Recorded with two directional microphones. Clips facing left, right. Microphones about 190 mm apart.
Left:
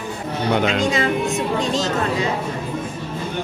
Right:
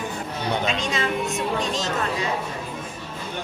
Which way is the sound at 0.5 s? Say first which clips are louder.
Left 7 dB; 90° left.